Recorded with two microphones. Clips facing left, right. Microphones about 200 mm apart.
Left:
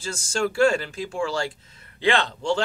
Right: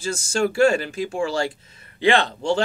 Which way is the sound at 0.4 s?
15° right (ahead or behind).